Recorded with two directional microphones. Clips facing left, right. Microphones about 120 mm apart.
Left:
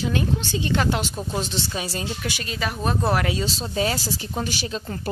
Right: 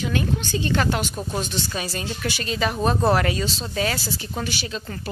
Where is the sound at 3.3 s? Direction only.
25° left (ahead or behind).